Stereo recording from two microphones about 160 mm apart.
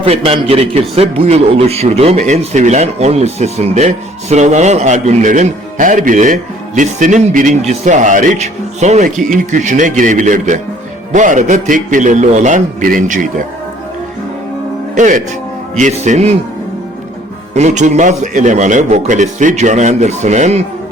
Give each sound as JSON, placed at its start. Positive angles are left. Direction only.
{"t": 0.0, "sound": "a man's voice", "side_deg": -40}
{"t": 14.9, "sound": "a man's voice", "side_deg": -50}
{"t": 17.5, "sound": "a man's voice", "side_deg": -45}